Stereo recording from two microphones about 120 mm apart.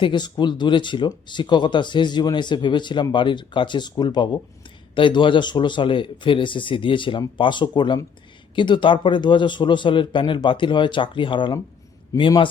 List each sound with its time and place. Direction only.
0.0 s speech: 40° left (ahead or behind)
12.1 s a man's voice: 30° left (ahead or behind)